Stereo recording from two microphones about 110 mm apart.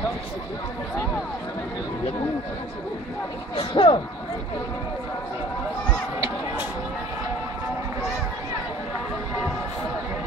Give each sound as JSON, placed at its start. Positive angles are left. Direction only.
{"t": 3.5, "sound": "speech", "side_deg": 50}